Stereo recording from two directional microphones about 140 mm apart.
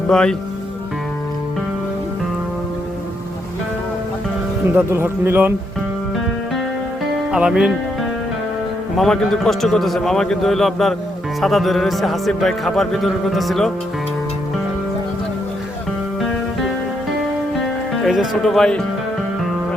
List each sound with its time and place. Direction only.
0.1 s speech: 5° left (ahead or behind)
4.7 s a man's voice: 15° right (ahead or behind)
7.3 s music: 5° right (ahead or behind)
9.0 s speech: 5° left (ahead or behind)
18.0 s speech: centre (ahead or behind)